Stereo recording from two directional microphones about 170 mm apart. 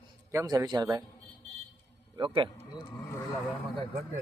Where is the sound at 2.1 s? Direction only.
30° right (ahead or behind).